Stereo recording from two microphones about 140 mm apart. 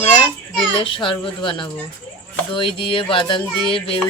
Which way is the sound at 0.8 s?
35° left (ahead or behind).